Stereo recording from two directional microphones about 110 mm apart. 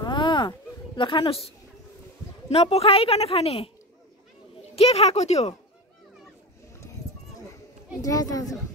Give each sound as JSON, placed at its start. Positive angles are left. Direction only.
{"t": 0.0, "sound": "a sound", "side_deg": 45}
{"t": 2.5, "sound": "a woman's voice", "side_deg": 65}
{"t": 4.7, "sound": "speech", "side_deg": 70}
{"t": 8.0, "sound": "speech", "side_deg": 35}